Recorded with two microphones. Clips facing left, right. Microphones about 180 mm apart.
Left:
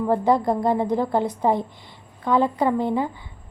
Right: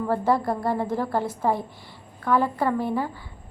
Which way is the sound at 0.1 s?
20° left (ahead or behind).